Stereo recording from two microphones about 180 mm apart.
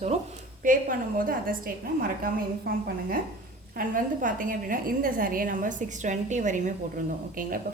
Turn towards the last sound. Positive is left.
turn(degrees=-45)  # may be behind; listen again after turning